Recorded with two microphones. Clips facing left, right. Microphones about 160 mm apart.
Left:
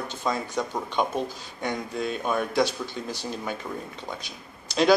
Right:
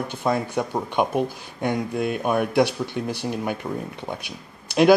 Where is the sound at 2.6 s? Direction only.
60° right (ahead or behind).